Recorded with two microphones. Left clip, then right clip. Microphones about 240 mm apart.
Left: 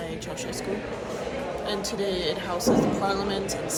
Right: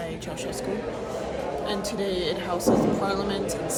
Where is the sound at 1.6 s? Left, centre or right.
Centre.